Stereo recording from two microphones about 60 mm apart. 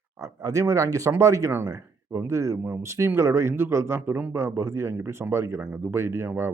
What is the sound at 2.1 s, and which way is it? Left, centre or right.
Speech, right.